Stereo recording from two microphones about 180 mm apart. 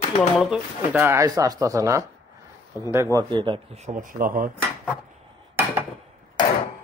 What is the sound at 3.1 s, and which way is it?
Speech, 25° right (ahead or behind).